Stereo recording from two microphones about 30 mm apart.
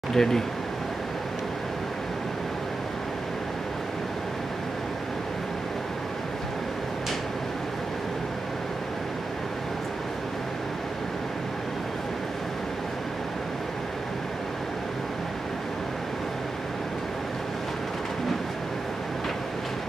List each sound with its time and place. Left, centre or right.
0.1 s speech: centre